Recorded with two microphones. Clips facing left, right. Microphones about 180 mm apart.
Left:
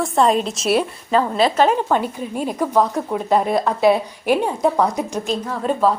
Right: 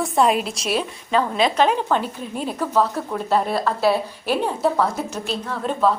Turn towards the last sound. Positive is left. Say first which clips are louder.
# left 2 dB
turn(degrees=5)  # may be behind; listen again after turning